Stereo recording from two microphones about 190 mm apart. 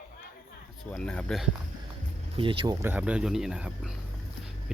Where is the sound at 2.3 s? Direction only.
25° right (ahead or behind).